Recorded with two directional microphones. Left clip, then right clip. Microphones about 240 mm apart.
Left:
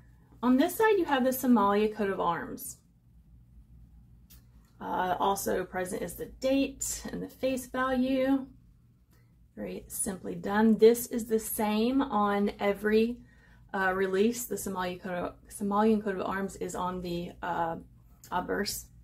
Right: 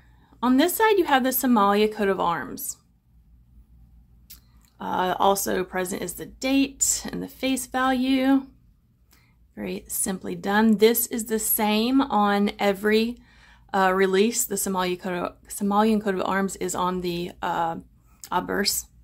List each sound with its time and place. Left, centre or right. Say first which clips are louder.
0.4 s speech: right 5 dB; right
4.7 s speech: right 6 dB; right
9.6 s speech: right 7 dB; right